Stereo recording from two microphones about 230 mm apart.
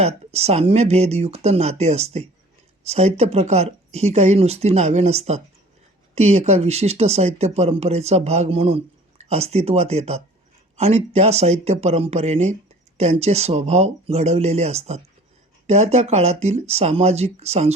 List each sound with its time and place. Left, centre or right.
0.0 s speech: right